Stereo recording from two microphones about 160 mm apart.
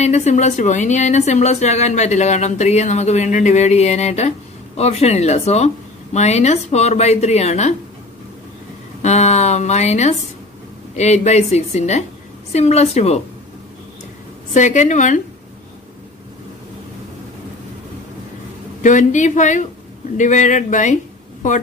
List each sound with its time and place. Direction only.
0.0 s a woman's voice: 45° left (ahead or behind)
9.0 s a woman's voice: 45° left (ahead or behind)
14.5 s a woman's voice: 50° left (ahead or behind)
18.8 s a woman's voice: 50° left (ahead or behind)